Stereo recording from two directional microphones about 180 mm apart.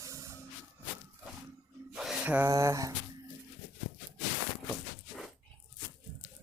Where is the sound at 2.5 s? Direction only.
15° right (ahead or behind).